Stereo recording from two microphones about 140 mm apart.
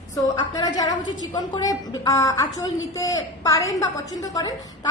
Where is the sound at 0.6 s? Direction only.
30° left (ahead or behind).